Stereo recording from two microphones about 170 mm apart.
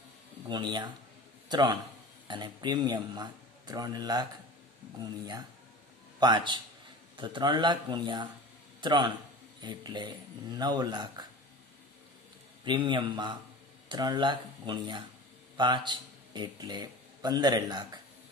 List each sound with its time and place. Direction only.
0.5 s speech: 25° right (ahead or behind)
6.1 s speech: 25° right (ahead or behind)
12.6 s a man's voice: 25° right (ahead or behind)